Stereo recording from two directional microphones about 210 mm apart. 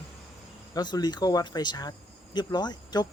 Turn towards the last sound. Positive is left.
turn(degrees=20)  # may be behind; listen again after turning